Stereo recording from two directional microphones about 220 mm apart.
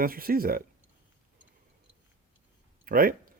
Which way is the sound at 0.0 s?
40° right (ahead or behind).